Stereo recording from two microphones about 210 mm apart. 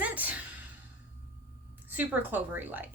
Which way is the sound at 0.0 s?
5° right (ahead or behind).